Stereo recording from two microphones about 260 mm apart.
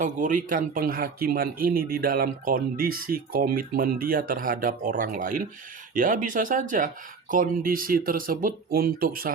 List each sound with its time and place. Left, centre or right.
0.0 s speech: right